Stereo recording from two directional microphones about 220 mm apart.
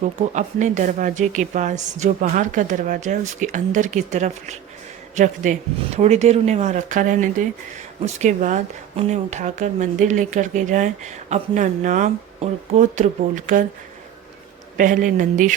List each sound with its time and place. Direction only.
0.3 s speech: 35° right (ahead or behind)
14.8 s speech: 35° right (ahead or behind)